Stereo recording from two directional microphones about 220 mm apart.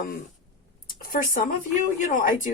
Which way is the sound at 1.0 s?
40° left (ahead or behind).